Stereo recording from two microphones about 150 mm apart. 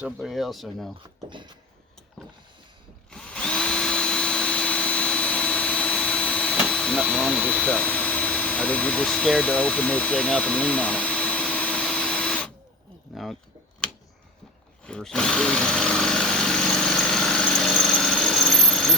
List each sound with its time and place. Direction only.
0.0 s speech: centre (ahead or behind)
1.3 s a sound: 30° right (ahead or behind)
3.1 s drill: 5° left (ahead or behind)
13.1 s keys jangling: centre (ahead or behind)
14.8 s drill: 5° left (ahead or behind)